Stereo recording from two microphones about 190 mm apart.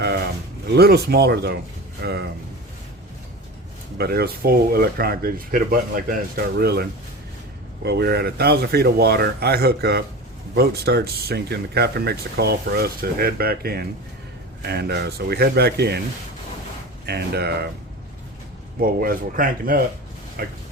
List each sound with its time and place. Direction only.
0.7 s speech: 55° right (ahead or behind)
3.9 s speech: 55° right (ahead or behind)
7.9 s speech: 60° right (ahead or behind)
17.1 s speech: 60° right (ahead or behind)
18.8 s speech: 50° right (ahead or behind)